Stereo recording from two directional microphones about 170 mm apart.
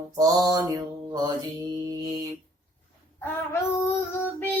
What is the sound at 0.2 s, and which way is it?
Mantra, 20° right (ahead or behind).